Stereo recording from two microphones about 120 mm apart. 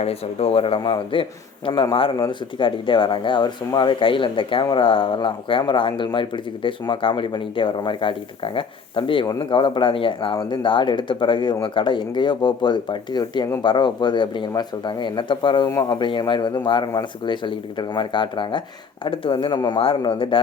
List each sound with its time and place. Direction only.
0.0 s a man's voice: 60° left (ahead or behind)